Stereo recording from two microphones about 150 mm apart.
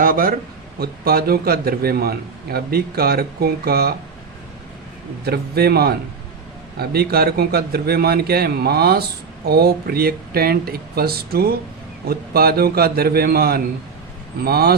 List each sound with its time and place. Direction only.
0.0 s speech: 70° right (ahead or behind)
0.8 s a man's voice: 90° right
5.2 s a man's voice: 90° right